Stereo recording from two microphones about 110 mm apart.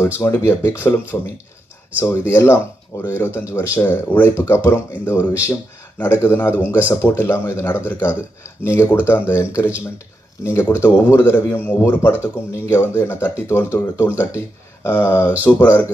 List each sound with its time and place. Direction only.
0.0 s a man's voice: 20° left (ahead or behind)